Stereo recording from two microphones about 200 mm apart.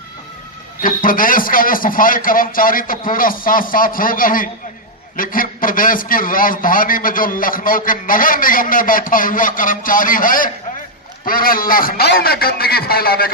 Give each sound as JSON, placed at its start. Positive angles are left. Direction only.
{"t": 0.8, "sound": "a man's voice", "side_deg": 45}